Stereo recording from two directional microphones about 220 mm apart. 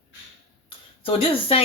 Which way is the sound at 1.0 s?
25° left (ahead or behind).